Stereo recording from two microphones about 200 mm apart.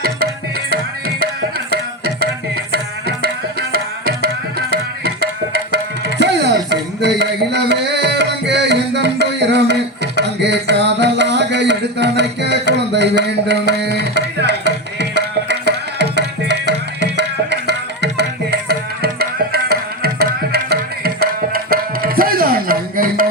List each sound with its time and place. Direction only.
0.7 s tabla: 50° right (ahead or behind)
3.7 s tabla: 50° right (ahead or behind)